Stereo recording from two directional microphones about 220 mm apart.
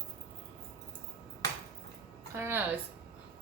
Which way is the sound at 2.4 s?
10° right (ahead or behind).